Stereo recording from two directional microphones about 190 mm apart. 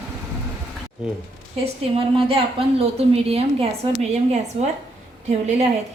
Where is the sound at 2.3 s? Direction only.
30° right (ahead or behind).